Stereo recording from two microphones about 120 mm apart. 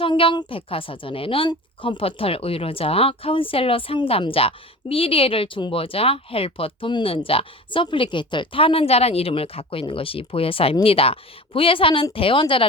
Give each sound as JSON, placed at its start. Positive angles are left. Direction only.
{"t": 0.0, "sound": "a woman's voice", "side_deg": 45}